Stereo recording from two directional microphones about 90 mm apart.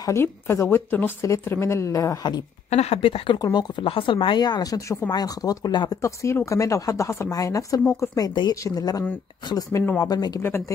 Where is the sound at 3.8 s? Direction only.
80° left; by 6.0 s 45° left (ahead or behind).